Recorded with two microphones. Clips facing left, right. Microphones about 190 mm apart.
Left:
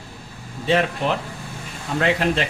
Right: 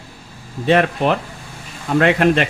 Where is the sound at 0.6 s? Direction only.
60° right (ahead or behind).